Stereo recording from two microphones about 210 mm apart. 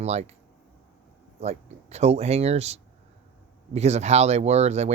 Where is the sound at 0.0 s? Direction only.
30° right (ahead or behind).